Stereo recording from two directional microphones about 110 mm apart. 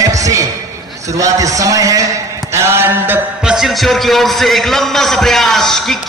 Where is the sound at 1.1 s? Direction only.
30° right (ahead or behind).